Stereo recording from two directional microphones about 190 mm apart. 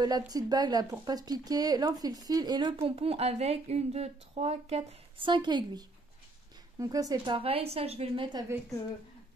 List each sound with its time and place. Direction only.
0.0 s speech: 20° right (ahead or behind)